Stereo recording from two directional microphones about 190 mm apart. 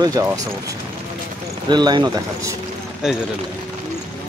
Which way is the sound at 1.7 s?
20° right (ahead or behind).